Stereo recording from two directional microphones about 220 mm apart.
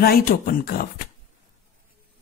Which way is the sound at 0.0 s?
40° left (ahead or behind).